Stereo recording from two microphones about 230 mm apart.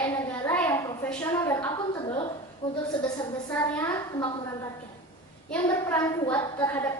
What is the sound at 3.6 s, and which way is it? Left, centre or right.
A woman's voice, centre.